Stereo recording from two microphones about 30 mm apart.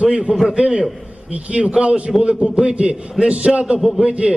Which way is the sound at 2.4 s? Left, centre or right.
Right.